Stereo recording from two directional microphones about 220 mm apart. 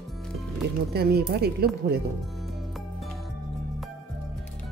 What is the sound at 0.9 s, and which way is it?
Speech, 45° right (ahead or behind).